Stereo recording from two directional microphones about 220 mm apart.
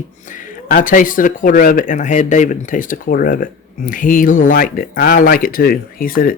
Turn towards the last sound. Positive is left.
turn(degrees=40)  # may be behind; listen again after turning